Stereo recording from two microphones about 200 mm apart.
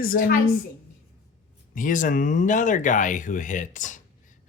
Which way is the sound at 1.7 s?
40° left (ahead or behind).